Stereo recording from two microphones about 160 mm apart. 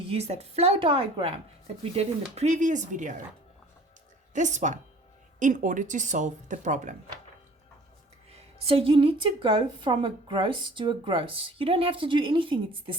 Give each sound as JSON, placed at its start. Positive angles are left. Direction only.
{"t": 0.1, "sound": "a woman's voice", "side_deg": -40}
{"t": 4.4, "sound": "speech", "side_deg": -50}
{"t": 8.3, "sound": "a woman's voice", "side_deg": -35}